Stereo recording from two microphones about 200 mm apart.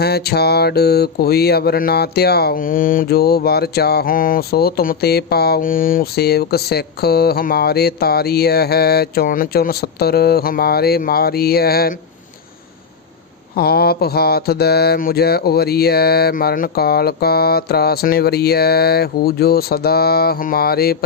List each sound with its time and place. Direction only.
0.0 s mantra: 50° left (ahead or behind)
13.6 s mantra: 50° left (ahead or behind)